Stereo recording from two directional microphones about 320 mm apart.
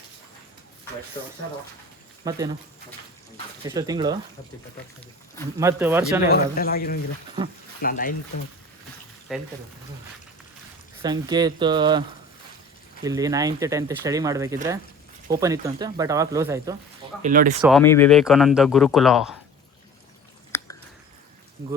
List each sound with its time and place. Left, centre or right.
2.2 s speech: centre
3.7 s speech: centre
5.5 s speech: centre
6.6 s speech: left
9.3 s speech: centre
11.0 s speech: centre
13.1 s speech: centre
17.2 s speech: right
17.6 s speech: centre